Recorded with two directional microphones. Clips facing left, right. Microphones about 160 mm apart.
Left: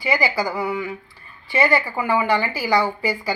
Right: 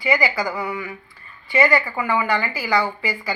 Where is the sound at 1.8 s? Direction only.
30° left (ahead or behind).